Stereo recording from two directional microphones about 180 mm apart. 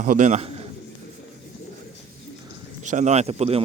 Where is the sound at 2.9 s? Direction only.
40° right (ahead or behind).